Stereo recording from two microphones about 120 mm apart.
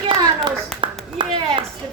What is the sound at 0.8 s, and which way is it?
Clapping, 45° right (ahead or behind).